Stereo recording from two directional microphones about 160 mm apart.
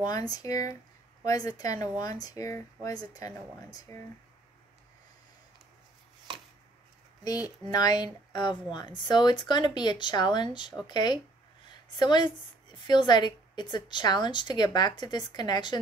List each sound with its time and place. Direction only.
0.0 s a woman's voice: 25° left (ahead or behind)
7.2 s a woman's voice: 25° left (ahead or behind)